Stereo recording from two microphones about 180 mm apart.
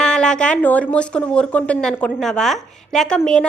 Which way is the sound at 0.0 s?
5° left (ahead or behind).